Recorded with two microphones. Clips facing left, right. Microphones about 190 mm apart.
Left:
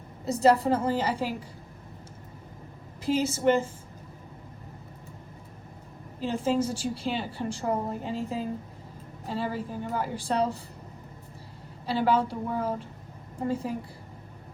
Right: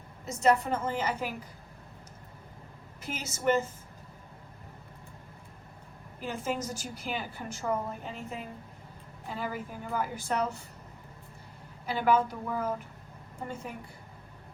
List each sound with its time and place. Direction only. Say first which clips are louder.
0.3 s a woman's voice: left 4 dB; 35° left (ahead or behind)
3.0 s a woman's voice: left 9 dB; 30° left (ahead or behind)
6.2 s a woman's voice: left 7 dB; 30° left (ahead or behind)
11.9 s a woman's voice: left 2 dB; 30° left (ahead or behind)